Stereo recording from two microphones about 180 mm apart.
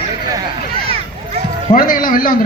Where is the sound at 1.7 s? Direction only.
50° left (ahead or behind).